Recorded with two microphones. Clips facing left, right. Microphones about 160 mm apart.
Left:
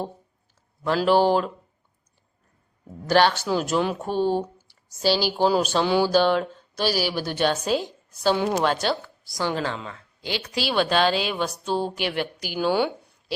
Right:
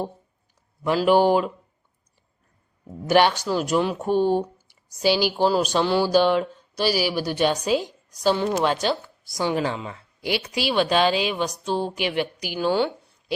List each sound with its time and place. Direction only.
0.9 s a woman's voice: 10° right (ahead or behind)
3.1 s a woman's voice: 15° right (ahead or behind)
3.4 s a woman's voice: centre (ahead or behind)
4.1 s a woman's voice: 15° right (ahead or behind)
5.4 s a woman's voice: centre (ahead or behind)
9.6 s a woman's voice: 15° right (ahead or behind)
10.5 s a woman's voice: centre (ahead or behind)